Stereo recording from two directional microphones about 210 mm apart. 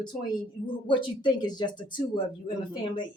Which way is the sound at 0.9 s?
20° left (ahead or behind).